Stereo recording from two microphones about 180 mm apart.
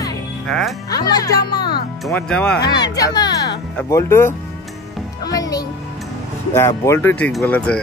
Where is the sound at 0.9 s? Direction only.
20° left (ahead or behind).